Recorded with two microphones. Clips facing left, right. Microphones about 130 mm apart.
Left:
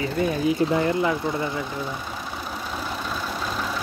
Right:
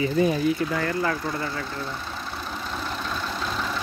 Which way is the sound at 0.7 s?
20° left (ahead or behind).